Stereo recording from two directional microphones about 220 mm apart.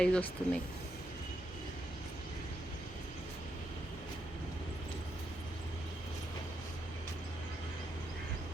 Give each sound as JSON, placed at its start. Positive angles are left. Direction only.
{"t": 0.0, "sound": "speech", "side_deg": 5}